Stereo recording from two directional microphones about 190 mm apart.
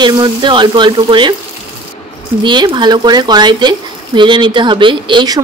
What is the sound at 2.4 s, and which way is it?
Speech, 25° right (ahead or behind).